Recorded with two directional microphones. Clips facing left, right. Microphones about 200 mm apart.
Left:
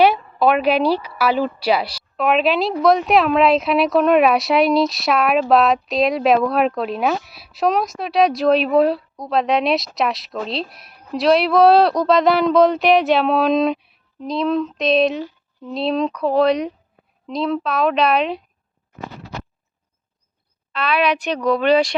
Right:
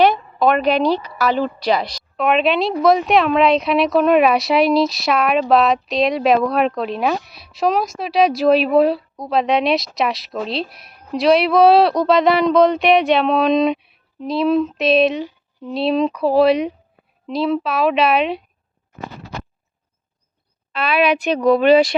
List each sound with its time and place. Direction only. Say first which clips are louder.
0.0 s a woman's voice: even; 5° left (ahead or behind)
20.7 s a woman's voice: right 2 dB; 5° right (ahead or behind)